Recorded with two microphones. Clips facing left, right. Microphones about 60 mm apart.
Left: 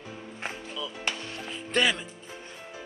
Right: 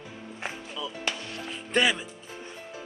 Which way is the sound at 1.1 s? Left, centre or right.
Left.